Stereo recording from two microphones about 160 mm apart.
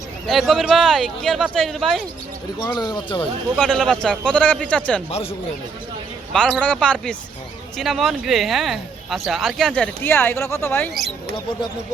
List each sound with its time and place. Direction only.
0.3 s speech: centre (ahead or behind)
2.6 s speech: 25° left (ahead or behind)
3.5 s speech: 5° left (ahead or behind)
6.3 s speech: 5° left (ahead or behind)